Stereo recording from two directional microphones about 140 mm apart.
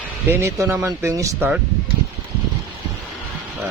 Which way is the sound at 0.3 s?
20° right (ahead or behind).